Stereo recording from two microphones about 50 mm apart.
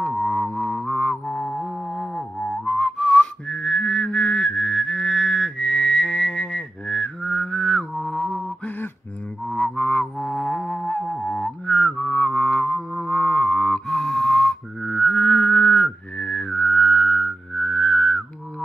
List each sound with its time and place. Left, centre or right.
0.0 s music: centre
0.5 s music: left
1.6 s music: centre
1.9 s whistling: centre
7.9 s mantra: centre
8.6 s a sound: left
9.6 s music: left; by 13.1 s centre
13.1 s music: centre